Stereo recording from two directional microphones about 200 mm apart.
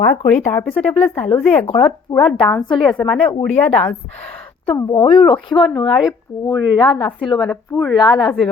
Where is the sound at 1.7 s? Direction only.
25° left (ahead or behind).